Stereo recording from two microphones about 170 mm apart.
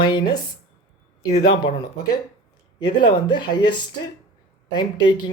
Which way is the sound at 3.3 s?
25° left (ahead or behind).